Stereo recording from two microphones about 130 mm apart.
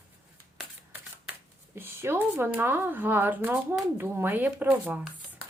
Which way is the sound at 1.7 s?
15° right (ahead or behind).